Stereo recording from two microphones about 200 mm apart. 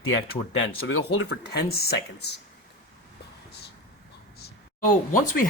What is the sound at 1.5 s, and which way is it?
Speech, 50° left (ahead or behind).